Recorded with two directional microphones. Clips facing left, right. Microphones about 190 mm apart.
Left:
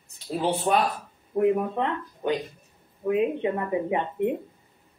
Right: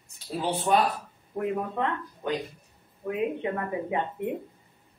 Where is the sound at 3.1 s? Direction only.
20° left (ahead or behind).